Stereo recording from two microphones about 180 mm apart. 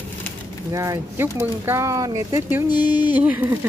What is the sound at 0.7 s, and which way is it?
Speech, 15° right (ahead or behind).